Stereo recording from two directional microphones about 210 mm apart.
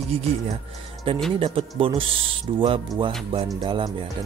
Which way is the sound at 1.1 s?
25° right (ahead or behind).